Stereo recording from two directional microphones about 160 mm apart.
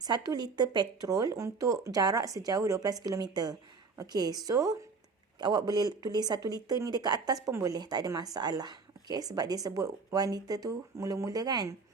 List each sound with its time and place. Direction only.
0.0 s speech: 25° right (ahead or behind)